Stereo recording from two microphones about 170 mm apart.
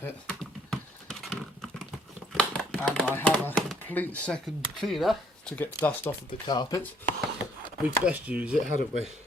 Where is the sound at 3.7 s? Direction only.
10° left (ahead or behind).